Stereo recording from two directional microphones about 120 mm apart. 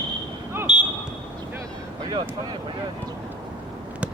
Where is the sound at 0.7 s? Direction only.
10° right (ahead or behind).